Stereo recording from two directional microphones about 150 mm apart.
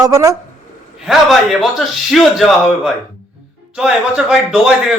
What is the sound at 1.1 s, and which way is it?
A man's voice, centre (ahead or behind).